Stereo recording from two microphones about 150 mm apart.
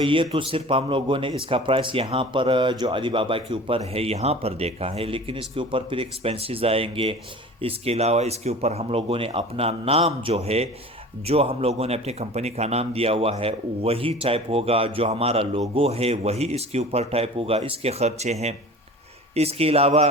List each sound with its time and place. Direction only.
0.0 s a man's voice: 35° right (ahead or behind)